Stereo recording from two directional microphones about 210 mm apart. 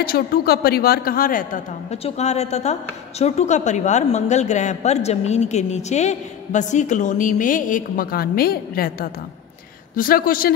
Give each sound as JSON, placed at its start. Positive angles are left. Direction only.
{"t": 0.0, "sound": "a woman's voice", "side_deg": 45}